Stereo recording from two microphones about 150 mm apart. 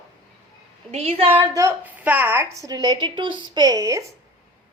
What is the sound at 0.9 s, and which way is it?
Speech, 40° right (ahead or behind).